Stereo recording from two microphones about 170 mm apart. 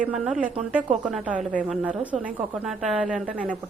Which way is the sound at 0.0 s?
5° right (ahead or behind).